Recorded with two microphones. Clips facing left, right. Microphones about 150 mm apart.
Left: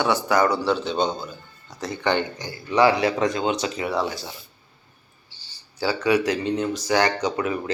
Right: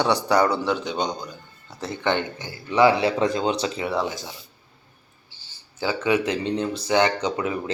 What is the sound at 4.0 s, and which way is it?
Speech, 20° right (ahead or behind).